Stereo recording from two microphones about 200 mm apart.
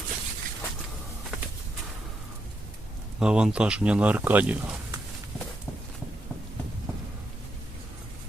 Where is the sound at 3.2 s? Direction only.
5° right (ahead or behind).